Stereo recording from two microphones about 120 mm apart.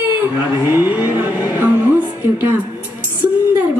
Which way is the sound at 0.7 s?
15° right (ahead or behind).